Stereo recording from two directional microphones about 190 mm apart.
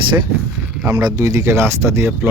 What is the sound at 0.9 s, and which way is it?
Speech, 20° right (ahead or behind).